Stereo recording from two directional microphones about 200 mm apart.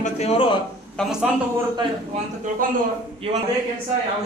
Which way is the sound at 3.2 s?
30° right (ahead or behind).